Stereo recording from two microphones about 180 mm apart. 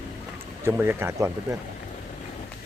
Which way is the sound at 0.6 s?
15° right (ahead or behind).